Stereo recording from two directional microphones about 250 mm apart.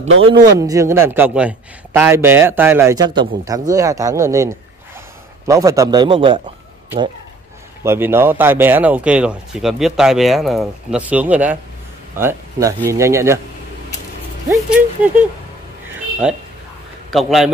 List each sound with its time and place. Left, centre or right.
0.2 s a man's voice: centre
7.8 s a man's voice: centre
14.5 s speech: centre